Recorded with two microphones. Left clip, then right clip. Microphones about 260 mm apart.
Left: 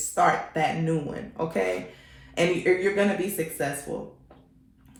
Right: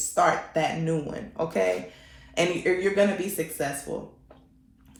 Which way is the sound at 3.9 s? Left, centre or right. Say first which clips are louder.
Even; right.